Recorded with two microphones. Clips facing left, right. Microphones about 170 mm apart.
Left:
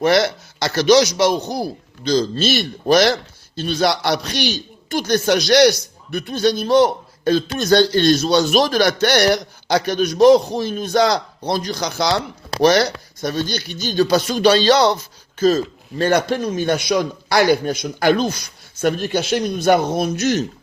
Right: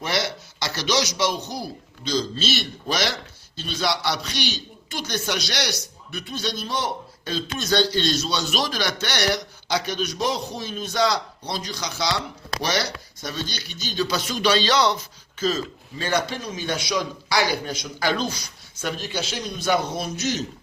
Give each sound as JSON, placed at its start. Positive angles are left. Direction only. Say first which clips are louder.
{"t": 0.0, "sound": "a man's voice", "louder": "left 11 dB", "side_deg": 50}
{"t": 15.4, "sound": "a man's voice", "louder": "left 9 dB", "side_deg": 50}